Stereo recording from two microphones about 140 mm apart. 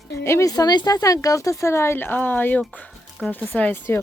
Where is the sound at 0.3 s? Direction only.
20° left (ahead or behind).